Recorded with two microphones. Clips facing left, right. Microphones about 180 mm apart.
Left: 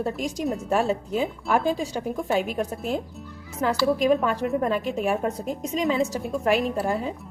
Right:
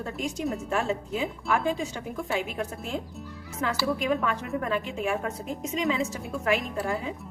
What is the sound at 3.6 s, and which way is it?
A woman's voice, 35° left (ahead or behind).